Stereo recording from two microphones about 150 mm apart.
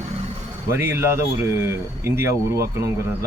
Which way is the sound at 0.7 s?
15° right (ahead or behind).